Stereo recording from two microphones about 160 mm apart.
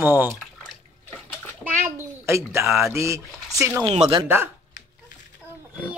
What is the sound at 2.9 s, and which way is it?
Speech, 20° right (ahead or behind).